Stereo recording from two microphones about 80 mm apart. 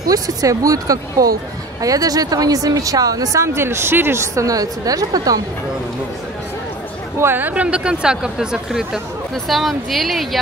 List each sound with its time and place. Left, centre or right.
0.1 s speech: right
3.4 s speech: right
4.4 s speech: right
7.2 s speech: right; by 10.4 s centre